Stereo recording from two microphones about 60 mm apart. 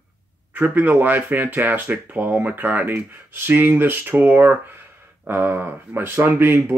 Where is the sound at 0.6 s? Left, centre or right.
Right.